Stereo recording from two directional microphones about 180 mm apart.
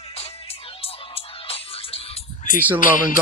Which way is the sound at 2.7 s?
50° left (ahead or behind).